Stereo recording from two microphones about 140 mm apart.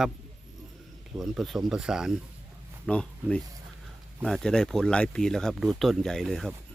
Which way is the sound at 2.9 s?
10° left (ahead or behind).